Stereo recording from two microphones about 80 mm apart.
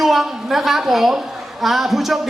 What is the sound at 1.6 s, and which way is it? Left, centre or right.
Speech, centre.